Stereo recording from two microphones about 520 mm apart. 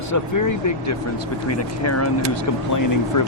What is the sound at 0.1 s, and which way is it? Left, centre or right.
Speech, left.